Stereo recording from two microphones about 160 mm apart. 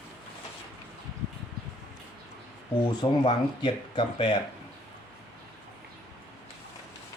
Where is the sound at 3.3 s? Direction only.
30° left (ahead or behind).